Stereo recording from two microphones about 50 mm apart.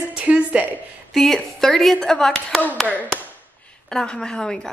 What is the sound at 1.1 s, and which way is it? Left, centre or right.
Speech, centre.